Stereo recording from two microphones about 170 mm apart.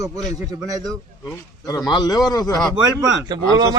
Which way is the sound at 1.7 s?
25° left (ahead or behind).